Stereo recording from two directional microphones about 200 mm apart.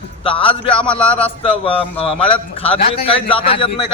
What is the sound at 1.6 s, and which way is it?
A man's voice, 30° left (ahead or behind).